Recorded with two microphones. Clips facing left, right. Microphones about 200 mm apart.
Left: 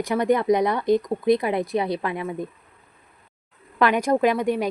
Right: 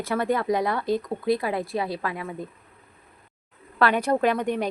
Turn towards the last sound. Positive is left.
turn(degrees=10)  # may be behind; listen again after turning